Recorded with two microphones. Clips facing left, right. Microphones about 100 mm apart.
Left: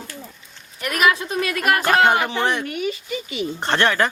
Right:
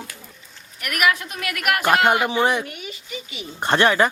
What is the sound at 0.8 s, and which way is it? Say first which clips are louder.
A woman's voice: left 2 dB; 30° left (ahead or behind).